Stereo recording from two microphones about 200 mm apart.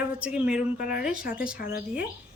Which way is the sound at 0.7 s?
45° left (ahead or behind).